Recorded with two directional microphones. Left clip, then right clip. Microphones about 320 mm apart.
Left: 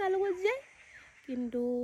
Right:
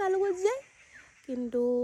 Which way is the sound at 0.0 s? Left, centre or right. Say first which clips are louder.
Right 3 dB; centre.